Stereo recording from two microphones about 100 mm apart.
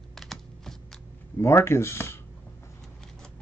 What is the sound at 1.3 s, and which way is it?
Speech, 25° left (ahead or behind).